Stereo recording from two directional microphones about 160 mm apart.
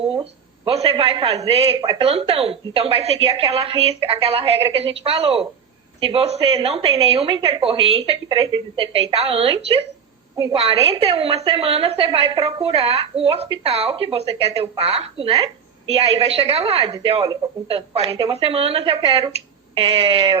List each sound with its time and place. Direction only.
0.0 s a woman's voice: 35° right (ahead or behind)